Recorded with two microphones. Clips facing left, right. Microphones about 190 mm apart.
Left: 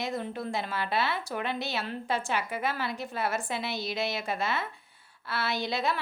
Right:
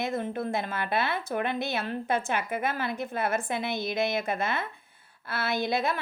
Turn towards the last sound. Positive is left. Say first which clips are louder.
# right 3 dB
turn(degrees=-55)  # may be behind; listen again after turning